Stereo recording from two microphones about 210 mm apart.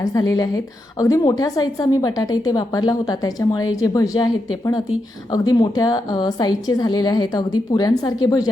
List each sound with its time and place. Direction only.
0.0 s a woman's voice: 20° left (ahead or behind)
5.3 s a woman's voice: 20° left (ahead or behind)